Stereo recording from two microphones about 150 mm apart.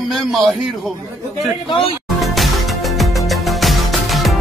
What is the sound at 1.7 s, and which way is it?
Speech, 35° left (ahead or behind).